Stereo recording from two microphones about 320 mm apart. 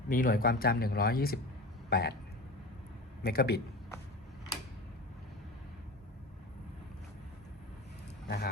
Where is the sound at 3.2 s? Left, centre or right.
Left.